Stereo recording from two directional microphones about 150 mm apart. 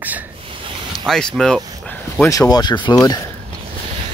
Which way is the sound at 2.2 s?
25° left (ahead or behind).